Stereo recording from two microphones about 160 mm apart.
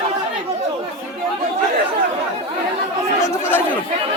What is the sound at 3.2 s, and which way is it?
Chatter, 15° left (ahead or behind).